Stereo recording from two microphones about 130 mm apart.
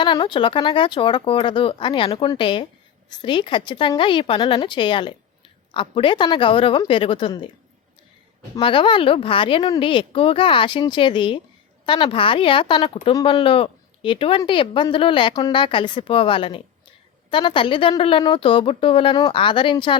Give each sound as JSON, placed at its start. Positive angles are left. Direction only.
{"t": 0.0, "sound": "a woman's voice", "side_deg": 40}
{"t": 8.6, "sound": "a woman's voice", "side_deg": 40}